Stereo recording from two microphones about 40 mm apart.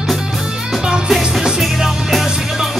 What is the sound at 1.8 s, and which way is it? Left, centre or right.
Music, centre.